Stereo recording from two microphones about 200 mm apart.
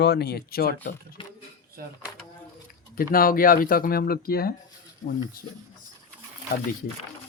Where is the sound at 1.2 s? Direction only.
25° left (ahead or behind).